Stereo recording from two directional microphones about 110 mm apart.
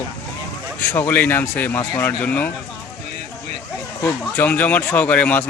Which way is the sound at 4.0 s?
20° left (ahead or behind).